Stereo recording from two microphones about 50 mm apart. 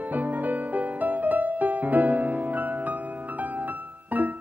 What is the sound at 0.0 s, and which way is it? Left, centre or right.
Music, right.